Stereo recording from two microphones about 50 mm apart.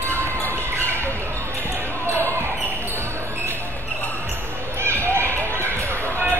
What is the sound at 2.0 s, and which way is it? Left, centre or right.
Basketball bounce, right.